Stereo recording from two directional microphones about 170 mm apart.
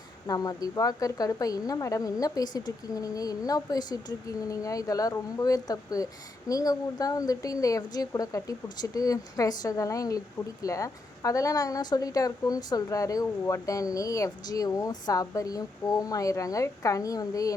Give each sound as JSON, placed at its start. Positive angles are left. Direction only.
{"t": 0.3, "sound": "a woman's voice", "side_deg": 20}